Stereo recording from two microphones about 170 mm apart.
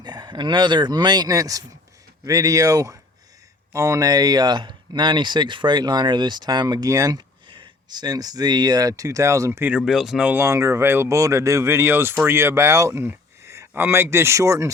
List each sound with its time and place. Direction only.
0.0 s speech: 25° right (ahead or behind)